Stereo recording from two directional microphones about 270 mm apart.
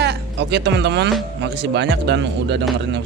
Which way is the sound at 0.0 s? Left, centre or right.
Right.